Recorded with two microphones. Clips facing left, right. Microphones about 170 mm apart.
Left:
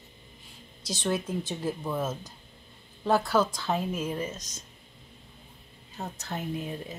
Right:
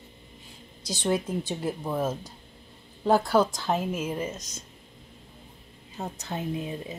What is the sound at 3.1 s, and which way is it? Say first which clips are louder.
A woman's voice: right 3 dB; 15° right (ahead or behind).